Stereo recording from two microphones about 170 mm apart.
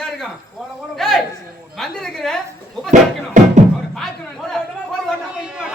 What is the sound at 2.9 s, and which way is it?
Music, 45° right (ahead or behind).